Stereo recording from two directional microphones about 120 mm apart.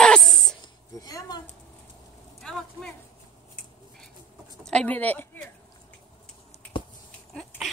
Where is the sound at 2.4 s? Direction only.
5° left (ahead or behind).